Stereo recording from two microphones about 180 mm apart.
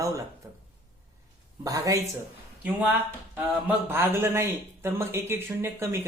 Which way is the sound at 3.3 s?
15° right (ahead or behind).